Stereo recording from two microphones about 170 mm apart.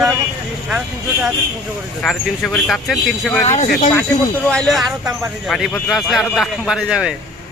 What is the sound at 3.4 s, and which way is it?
Speech, 40° left (ahead or behind).